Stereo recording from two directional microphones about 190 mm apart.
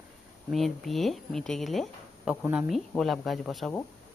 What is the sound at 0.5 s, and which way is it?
Speech, centre (ahead or behind).